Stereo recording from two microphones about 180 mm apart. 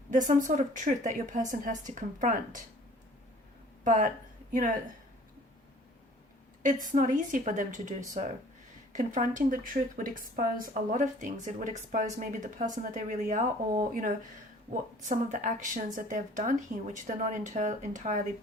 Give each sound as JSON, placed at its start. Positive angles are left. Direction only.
{"t": 0.1, "sound": "speech", "side_deg": -45}
{"t": 3.8, "sound": "speech", "side_deg": -45}
{"t": 6.6, "sound": "speech", "side_deg": -45}